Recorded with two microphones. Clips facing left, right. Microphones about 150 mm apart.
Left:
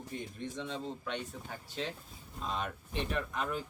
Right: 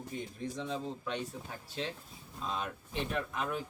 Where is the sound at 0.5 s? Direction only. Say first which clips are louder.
Right 2 dB; 5° right (ahead or behind).